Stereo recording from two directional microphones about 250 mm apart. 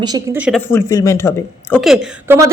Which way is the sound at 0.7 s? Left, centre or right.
Centre.